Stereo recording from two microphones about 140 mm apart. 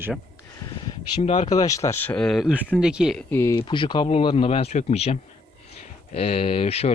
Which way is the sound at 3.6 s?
35° left (ahead or behind).